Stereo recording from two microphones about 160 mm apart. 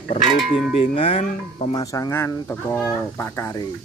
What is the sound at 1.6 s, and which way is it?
Speech, 25° left (ahead or behind).